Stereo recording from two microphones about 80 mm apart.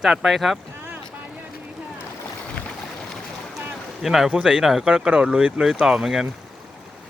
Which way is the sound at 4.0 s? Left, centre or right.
Centre.